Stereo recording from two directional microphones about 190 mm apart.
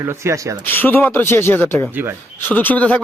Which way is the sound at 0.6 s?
10° left (ahead or behind).